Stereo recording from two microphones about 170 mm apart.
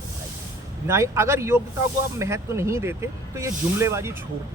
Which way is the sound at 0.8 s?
15° right (ahead or behind).